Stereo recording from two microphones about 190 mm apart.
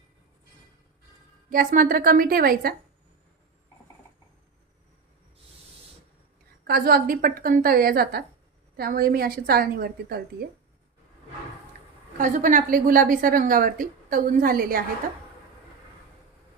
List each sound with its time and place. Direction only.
1.5 s a woman's voice: 45° right (ahead or behind)
6.7 s a woman's voice: 50° right (ahead or behind)
12.1 s a woman's voice: 40° right (ahead or behind)